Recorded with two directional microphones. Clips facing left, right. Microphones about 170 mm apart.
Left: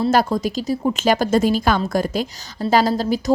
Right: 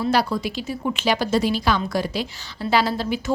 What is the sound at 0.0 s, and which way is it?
A woman's voice, 45° left (ahead or behind).